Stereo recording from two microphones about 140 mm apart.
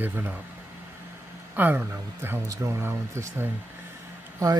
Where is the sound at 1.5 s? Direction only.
15° right (ahead or behind).